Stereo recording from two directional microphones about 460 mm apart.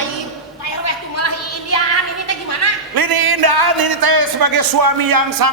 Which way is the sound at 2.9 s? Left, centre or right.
Right.